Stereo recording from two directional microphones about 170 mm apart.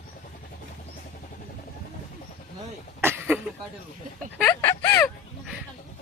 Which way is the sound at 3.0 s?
15° right (ahead or behind).